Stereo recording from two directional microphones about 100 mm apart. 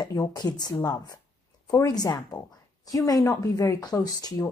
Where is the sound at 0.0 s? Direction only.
40° left (ahead or behind).